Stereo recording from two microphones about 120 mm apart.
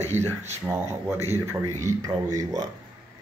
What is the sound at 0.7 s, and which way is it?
Speech, 25° right (ahead or behind).